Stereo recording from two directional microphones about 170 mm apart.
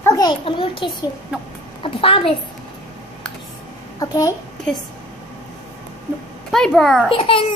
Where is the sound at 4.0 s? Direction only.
20° left (ahead or behind).